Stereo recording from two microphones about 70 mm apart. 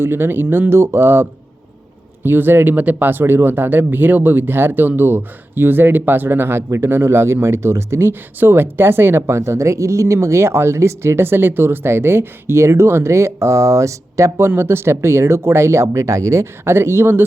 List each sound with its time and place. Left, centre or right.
0.0 s speech: right
14.4 s speech: right
16.6 s speech: right